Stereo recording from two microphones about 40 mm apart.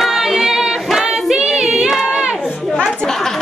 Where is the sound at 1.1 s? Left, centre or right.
Right.